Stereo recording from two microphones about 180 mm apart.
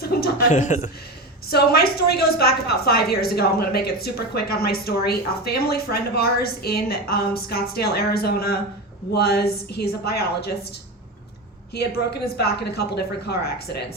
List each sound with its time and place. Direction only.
0.0 s a sound: 60° left (ahead or behind)
0.5 s a man's voice: 40° left (ahead or behind)
1.5 s a woman's voice: 60° left (ahead or behind)
11.7 s a woman's voice: 60° left (ahead or behind)